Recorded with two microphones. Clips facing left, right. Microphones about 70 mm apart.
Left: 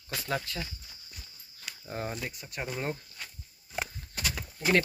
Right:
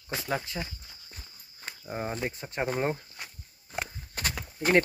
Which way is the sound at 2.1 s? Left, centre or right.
Right.